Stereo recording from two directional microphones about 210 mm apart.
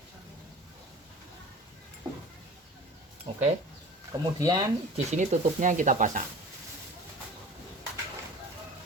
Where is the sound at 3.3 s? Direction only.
25° right (ahead or behind).